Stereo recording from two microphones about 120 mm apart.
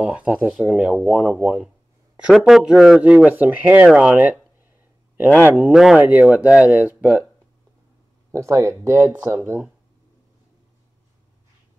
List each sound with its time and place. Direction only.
0.0 s speech: 10° right (ahead or behind)
5.5 s speech: 10° right (ahead or behind)
8.3 s speech: 25° right (ahead or behind)